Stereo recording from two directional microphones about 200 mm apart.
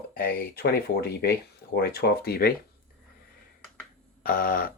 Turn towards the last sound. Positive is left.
turn(degrees=45)  # may be behind; listen again after turning